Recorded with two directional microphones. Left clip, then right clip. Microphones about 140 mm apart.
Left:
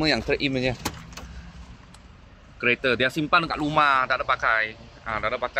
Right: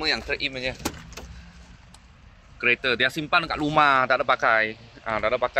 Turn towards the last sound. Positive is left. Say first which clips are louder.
# right 3 dB
turn(degrees=-15)  # may be behind; listen again after turning